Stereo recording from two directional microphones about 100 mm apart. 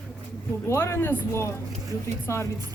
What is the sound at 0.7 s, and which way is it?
Speech, 25° left (ahead or behind).